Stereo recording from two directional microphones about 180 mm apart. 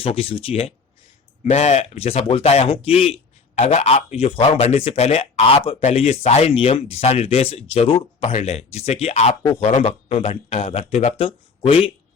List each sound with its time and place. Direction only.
0.0 s a man's voice: 30° left (ahead or behind)